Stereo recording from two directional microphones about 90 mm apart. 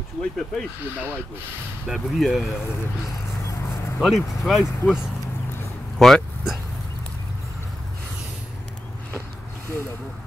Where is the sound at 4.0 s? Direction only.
Centre (ahead or behind).